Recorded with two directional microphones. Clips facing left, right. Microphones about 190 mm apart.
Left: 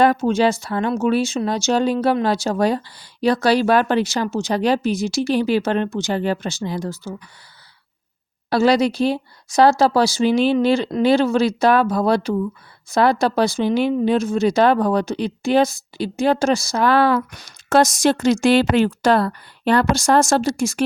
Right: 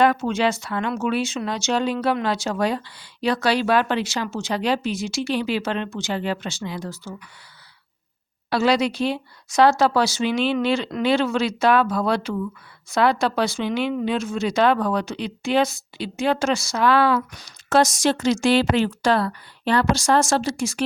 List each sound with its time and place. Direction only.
0.0 s speech: 35° left (ahead or behind)
8.4 s speech: 40° left (ahead or behind)